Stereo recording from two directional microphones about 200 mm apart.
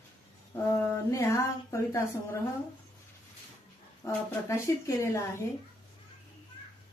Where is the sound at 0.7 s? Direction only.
15° left (ahead or behind).